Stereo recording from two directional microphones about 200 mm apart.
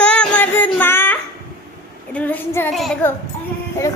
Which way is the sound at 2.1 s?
10° left (ahead or behind).